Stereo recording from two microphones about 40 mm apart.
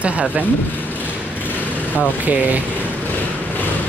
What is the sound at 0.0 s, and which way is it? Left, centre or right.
Speech, right.